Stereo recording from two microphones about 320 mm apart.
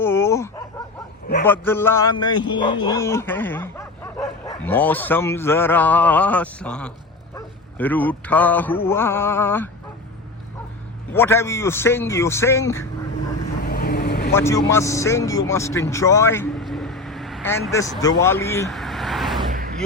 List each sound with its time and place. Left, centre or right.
0.0 s a sound: centre
1.5 s speech: centre
11.1 s speech: centre
13.7 s vehicle: left
14.3 s speech: centre
19.5 s a sound: right